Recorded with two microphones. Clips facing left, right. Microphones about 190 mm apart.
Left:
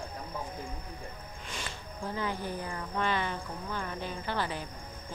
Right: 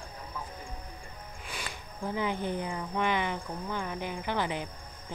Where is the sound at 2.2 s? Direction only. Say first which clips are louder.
Right 4 dB; 20° right (ahead or behind).